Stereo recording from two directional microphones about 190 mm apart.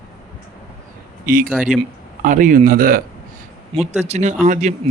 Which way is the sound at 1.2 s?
50° right (ahead or behind).